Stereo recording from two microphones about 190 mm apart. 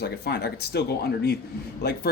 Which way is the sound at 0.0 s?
60° left (ahead or behind).